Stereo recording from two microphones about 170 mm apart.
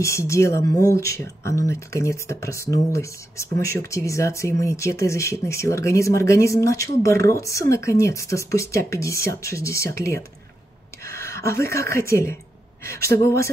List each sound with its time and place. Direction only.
0.0 s speech: 15° left (ahead or behind)